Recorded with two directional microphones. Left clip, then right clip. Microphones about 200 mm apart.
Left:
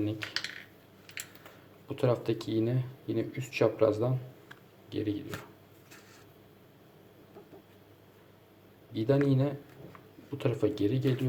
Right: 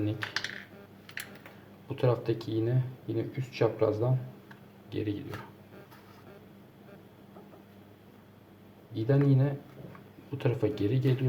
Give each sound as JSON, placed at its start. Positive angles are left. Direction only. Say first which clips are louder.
{"t": 0.0, "sound": "speech", "louder": "right 1 dB", "side_deg": 15}
{"t": 1.9, "sound": "speech", "louder": "even", "side_deg": 15}
{"t": 8.9, "sound": "speech", "louder": "left 1 dB", "side_deg": 25}